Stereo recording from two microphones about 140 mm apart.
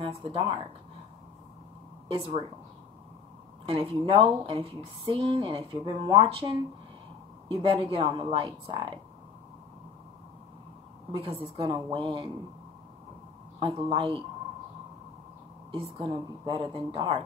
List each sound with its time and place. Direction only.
0.1 s a woman's voice: 40° right (ahead or behind)
3.6 s a woman's voice: 40° right (ahead or behind)
11.1 s a woman's voice: 40° right (ahead or behind)
13.6 s a woman's voice: 40° right (ahead or behind)
15.7 s a woman's voice: 40° right (ahead or behind)